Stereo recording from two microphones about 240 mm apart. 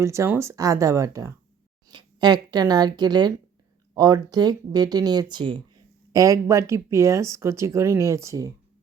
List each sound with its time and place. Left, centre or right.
0.0 s a woman's voice: centre